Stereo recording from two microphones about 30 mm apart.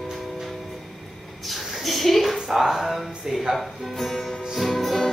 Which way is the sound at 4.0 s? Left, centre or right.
Centre.